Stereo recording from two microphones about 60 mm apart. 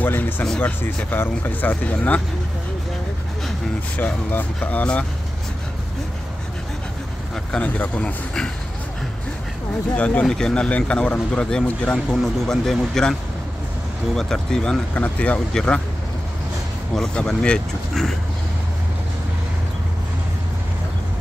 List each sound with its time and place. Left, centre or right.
0.0 s speech: left
4.0 s speech: left
4.6 s speech: left
7.5 s speech: left
9.9 s speech: left
10.2 s speech: centre
12.1 s speech: centre
14.1 s speech: centre
15.0 s speech: left
16.9 s speech: centre